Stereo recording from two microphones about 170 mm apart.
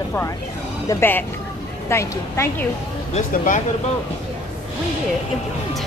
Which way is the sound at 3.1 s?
50° left (ahead or behind).